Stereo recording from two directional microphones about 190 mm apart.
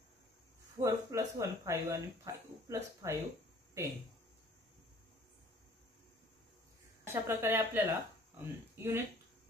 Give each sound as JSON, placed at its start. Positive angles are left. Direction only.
{"t": 0.7, "sound": "speech", "side_deg": -15}
{"t": 7.1, "sound": "speech", "side_deg": -10}